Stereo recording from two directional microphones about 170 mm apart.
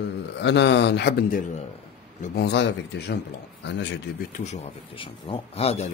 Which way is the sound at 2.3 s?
85° left.